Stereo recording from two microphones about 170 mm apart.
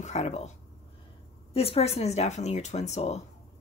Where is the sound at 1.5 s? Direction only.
35° left (ahead or behind).